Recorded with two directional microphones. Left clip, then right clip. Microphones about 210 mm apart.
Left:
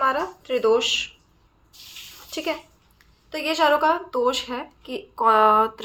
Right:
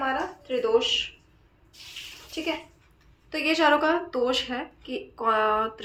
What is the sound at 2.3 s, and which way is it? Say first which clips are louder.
Speech: left 3 dB; 35° left (ahead or behind).